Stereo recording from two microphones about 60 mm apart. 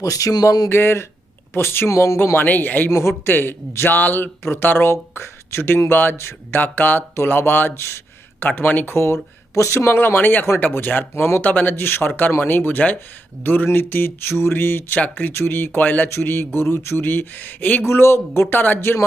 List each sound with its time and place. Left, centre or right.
0.0 s speech: left
0.7 s speech: left
2.9 s speech: left
6.1 s speech: left
6.6 s speech: left
9.6 s speech: left
9.8 s speech: left
14.9 s speech: left
15.3 s speech: left
16.0 s speech: left
17.8 s speech: left